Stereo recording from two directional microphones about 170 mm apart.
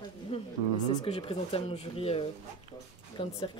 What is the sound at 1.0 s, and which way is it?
Speech, 30° left (ahead or behind).